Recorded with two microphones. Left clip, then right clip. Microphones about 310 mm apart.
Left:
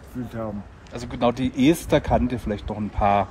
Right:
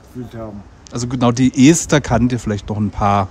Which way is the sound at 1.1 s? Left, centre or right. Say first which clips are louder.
Right 6 dB; right.